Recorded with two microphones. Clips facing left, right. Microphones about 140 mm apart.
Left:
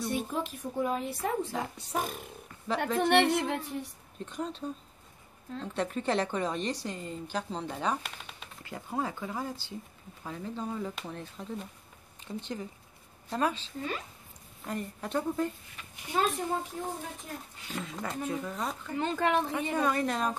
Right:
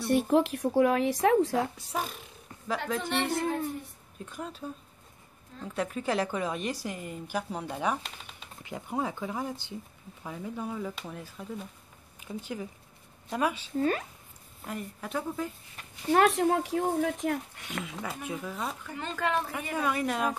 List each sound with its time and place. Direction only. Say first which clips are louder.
0.0 s speech: right 8 dB; 70° right (ahead or behind)
1.2 s speech: right 11 dB; 90° right
3.0 s speech: left 9 dB; 65° left (ahead or behind)
4.3 s speech: left 3 dB; 5° right (ahead or behind)
5.8 s a woman's voice: even; 5° right (ahead or behind)
13.7 s speech: right 8 dB; 50° right (ahead or behind)
14.7 s speech: left 2 dB; 5° right (ahead or behind)
16.1 s speech: right 7 dB; 80° right
17.8 s speech: left 2 dB; 5° right (ahead or behind)
18.9 s speech: left 3 dB; 20° left (ahead or behind)
19.8 s a woman's voice: right 1 dB; 5° right (ahead or behind)